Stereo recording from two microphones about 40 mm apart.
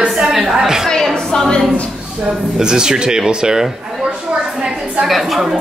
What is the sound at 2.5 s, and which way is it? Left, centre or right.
Speech, centre.